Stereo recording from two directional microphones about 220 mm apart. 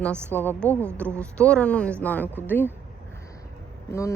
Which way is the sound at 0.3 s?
10° left (ahead or behind).